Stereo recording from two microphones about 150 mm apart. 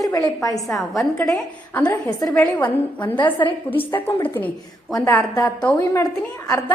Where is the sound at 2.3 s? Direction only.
10° left (ahead or behind).